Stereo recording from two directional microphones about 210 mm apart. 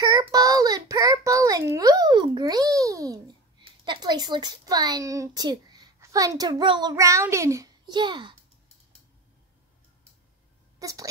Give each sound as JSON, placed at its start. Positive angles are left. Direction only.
{"t": 0.0, "sound": "child singing", "side_deg": -15}
{"t": 3.8, "sound": "a woman's voice", "side_deg": -20}
{"t": 10.8, "sound": "speech", "side_deg": -15}